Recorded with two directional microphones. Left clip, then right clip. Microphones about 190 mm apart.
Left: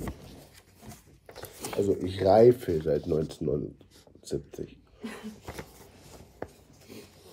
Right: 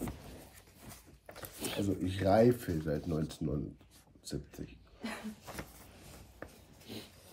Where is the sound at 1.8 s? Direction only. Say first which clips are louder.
Left 9 dB; 20° left (ahead or behind).